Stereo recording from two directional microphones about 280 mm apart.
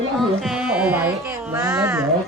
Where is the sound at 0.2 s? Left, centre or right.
Centre.